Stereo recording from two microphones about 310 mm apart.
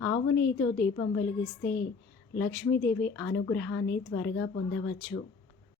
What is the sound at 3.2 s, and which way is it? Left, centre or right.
Speech, left.